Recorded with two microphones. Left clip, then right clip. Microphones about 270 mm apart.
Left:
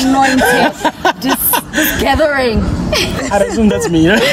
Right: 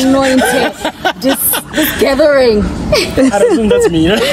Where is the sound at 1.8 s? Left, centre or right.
Centre.